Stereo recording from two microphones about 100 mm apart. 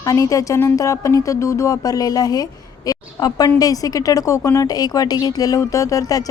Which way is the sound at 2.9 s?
40° left (ahead or behind).